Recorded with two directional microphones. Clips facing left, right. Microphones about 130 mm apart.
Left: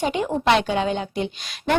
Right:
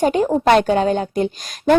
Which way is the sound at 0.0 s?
45° right (ahead or behind).